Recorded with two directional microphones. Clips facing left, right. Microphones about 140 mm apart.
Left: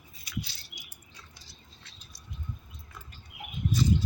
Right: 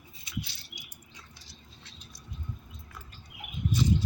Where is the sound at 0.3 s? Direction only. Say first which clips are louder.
Left 1 dB; 25° right (ahead or behind).